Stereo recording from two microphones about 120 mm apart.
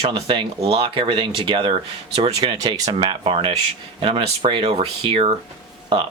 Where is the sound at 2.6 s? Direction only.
30° right (ahead or behind).